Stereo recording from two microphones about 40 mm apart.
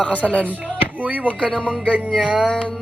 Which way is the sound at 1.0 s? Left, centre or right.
Right.